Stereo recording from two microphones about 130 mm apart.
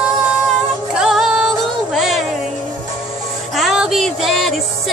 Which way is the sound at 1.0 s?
5° right (ahead or behind).